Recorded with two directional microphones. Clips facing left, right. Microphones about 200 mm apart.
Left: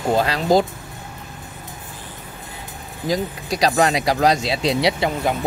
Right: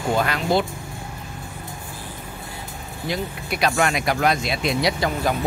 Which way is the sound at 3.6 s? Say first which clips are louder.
Left 3 dB; 35° left (ahead or behind).